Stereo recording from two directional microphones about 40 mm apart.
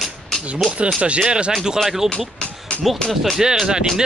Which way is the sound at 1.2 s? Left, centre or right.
Right.